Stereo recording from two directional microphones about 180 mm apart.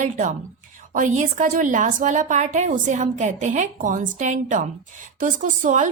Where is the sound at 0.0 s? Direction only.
45° right (ahead or behind).